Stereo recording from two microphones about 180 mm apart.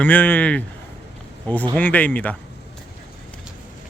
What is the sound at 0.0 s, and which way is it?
Speech, 10° left (ahead or behind).